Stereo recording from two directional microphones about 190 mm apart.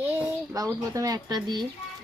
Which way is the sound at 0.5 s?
20° right (ahead or behind).